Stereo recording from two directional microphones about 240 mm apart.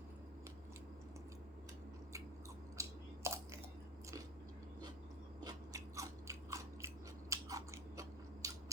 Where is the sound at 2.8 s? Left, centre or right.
Centre.